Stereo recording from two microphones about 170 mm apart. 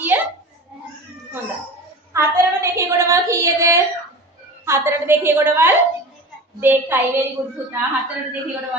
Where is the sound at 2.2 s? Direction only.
15° right (ahead or behind).